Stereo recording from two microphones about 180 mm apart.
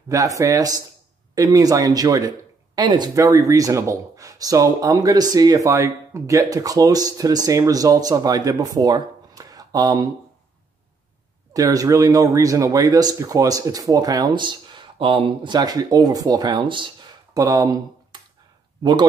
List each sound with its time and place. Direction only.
0.1 s speech: 20° right (ahead or behind)
11.5 s speech: 20° right (ahead or behind)
18.8 s speech: 25° right (ahead or behind)